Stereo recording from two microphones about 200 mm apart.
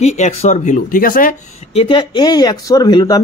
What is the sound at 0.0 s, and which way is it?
Speech, 35° left (ahead or behind).